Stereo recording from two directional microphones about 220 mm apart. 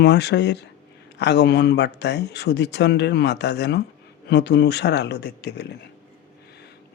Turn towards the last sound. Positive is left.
turn(degrees=50)  # may be behind; listen again after turning